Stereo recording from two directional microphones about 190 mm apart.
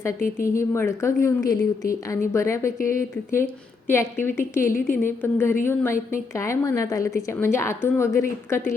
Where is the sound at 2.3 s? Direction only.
15° left (ahead or behind).